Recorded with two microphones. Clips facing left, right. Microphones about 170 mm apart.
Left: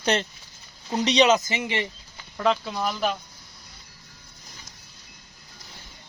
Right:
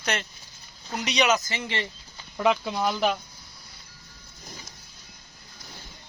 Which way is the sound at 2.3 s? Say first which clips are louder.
Even; 5° right (ahead or behind).